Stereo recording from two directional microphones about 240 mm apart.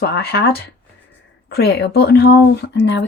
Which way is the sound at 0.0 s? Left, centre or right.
Left.